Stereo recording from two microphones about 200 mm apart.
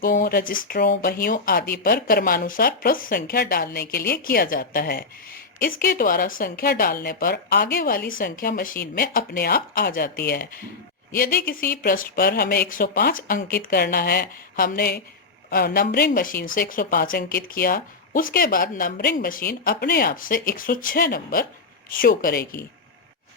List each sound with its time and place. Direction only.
0.0 s speech: 45° left (ahead or behind)